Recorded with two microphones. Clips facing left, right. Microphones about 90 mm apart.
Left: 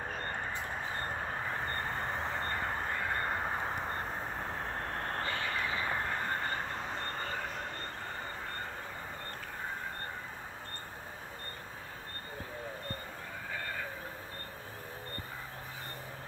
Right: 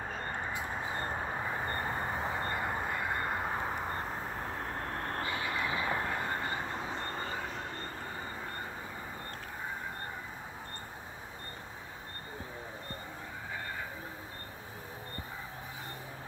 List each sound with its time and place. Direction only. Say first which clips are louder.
0.2 s a sound: right 1 dB; 10° right (ahead or behind)
0.9 s vehicle: right 2 dB; 15° right (ahead or behind)
4.7 s vehicle: even; 20° left (ahead or behind)
5.2 s vehicle: right 1 dB; 15° right (ahead or behind)